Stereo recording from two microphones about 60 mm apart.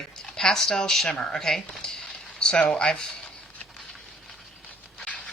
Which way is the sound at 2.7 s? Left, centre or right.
Centre.